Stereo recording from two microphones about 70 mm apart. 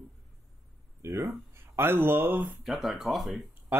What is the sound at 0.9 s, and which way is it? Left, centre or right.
Speech, right.